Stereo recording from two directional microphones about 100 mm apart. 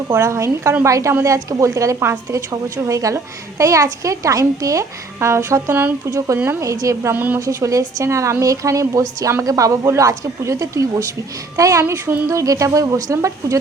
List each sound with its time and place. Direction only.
0.1 s a woman's voice: 30° right (ahead or behind)
7.1 s a woman's voice: 20° right (ahead or behind)
7.3 s a woman's voice: 30° right (ahead or behind)